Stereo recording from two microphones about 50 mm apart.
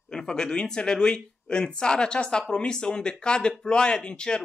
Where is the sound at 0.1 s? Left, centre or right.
Centre.